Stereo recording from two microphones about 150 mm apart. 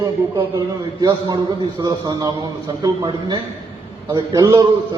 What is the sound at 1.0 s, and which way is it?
A man's voice, 25° right (ahead or behind).